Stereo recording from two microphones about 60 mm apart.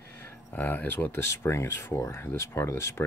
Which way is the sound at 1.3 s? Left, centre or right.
Left.